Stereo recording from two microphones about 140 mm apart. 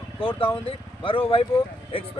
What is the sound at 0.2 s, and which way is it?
Speech, 40° left (ahead or behind).